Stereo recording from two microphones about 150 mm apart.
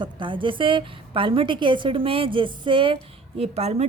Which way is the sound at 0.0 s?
35° right (ahead or behind).